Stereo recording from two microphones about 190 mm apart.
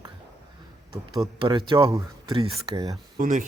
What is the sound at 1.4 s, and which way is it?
Speech, 25° right (ahead or behind).